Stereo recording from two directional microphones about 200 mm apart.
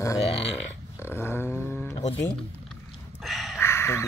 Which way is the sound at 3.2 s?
Centre (ahead or behind).